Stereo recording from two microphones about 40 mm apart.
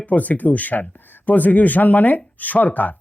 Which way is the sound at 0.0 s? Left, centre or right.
Left.